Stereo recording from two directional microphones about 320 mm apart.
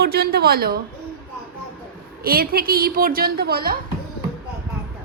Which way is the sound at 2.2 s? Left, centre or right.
Right.